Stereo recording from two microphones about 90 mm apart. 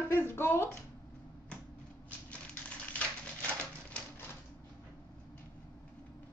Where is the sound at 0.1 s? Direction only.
25° left (ahead or behind).